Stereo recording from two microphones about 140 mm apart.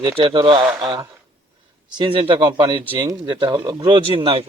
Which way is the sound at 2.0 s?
35° right (ahead or behind).